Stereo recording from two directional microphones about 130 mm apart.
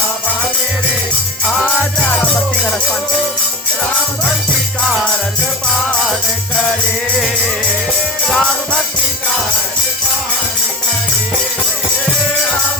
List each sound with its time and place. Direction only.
1.5 s music: 10° left (ahead or behind)
8.3 s music: 5° left (ahead or behind)